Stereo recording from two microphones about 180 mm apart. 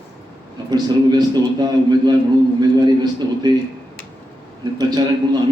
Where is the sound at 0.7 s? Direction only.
25° right (ahead or behind).